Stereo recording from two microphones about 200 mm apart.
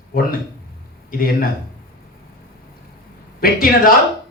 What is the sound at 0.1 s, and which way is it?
Speech, 45° left (ahead or behind).